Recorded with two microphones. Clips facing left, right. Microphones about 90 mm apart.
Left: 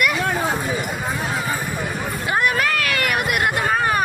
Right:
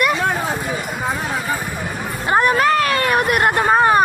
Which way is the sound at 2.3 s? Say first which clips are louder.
Right 6 dB; 35° right (ahead or behind).